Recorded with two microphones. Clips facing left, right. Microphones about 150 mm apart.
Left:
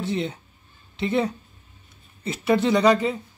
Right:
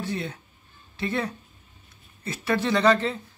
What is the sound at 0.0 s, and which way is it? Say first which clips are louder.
Speech: left 4 dB; 20° left (ahead or behind).